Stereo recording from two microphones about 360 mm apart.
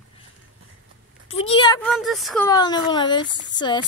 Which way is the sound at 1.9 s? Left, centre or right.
Centre.